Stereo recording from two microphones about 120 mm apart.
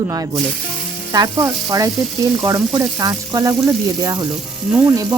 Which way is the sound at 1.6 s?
30° right (ahead or behind).